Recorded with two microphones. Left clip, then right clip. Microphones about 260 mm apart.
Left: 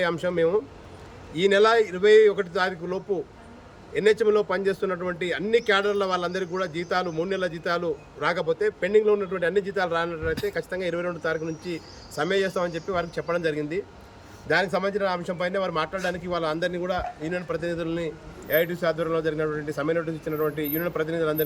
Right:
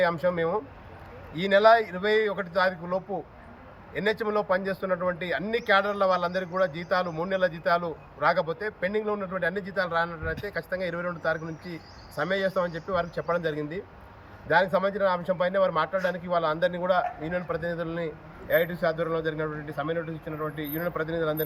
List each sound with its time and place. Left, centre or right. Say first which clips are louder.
0.0 s a man's voice: left 1 dB; centre
4.0 s a man's voice: left 6 dB; centre